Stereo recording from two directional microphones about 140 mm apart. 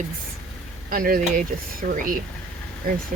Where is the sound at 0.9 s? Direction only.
90° right.